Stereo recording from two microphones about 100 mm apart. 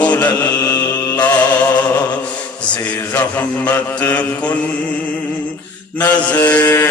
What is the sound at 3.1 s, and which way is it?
Mantra, 20° left (ahead or behind).